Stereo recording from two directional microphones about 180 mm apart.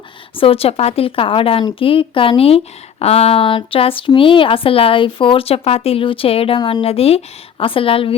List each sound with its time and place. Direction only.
0.3 s speech: 30° left (ahead or behind)